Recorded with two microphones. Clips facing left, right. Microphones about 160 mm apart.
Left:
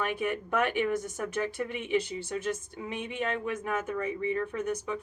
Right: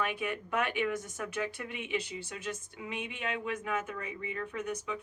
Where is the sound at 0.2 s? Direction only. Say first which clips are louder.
Left 4 dB; 45° left (ahead or behind).